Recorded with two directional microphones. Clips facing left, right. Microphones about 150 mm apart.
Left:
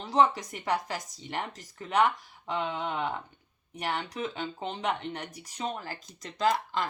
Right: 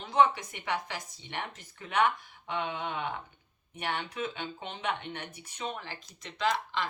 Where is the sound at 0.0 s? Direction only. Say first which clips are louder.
Left 1 dB; 35° left (ahead or behind).